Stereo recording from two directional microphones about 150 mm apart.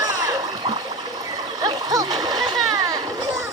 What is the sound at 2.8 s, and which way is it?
Children playing, 25° right (ahead or behind).